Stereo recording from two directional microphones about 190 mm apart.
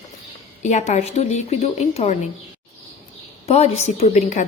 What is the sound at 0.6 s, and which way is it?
A woman's voice, 40° left (ahead or behind).